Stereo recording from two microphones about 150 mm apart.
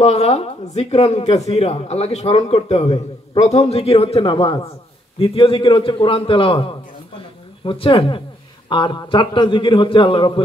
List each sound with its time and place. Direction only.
0.0 s a man's voice: 45° left (ahead or behind)